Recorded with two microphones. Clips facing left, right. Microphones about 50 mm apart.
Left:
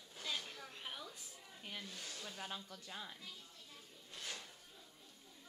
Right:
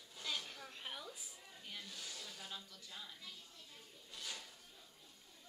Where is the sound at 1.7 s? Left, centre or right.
Left.